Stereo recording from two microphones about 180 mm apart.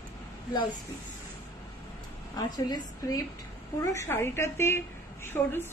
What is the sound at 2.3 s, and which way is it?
A woman's voice, 20° left (ahead or behind).